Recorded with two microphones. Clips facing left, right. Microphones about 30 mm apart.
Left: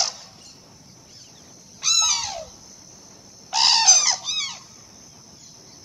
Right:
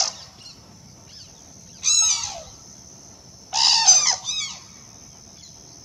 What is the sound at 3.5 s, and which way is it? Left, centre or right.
Bird, centre.